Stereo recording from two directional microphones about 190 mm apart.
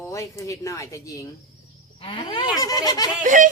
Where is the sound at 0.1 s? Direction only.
15° left (ahead or behind).